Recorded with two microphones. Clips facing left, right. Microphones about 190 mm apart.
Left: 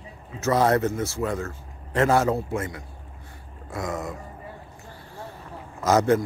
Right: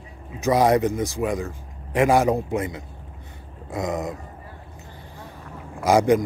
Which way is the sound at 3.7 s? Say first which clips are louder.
Right 4 dB; 20° right (ahead or behind).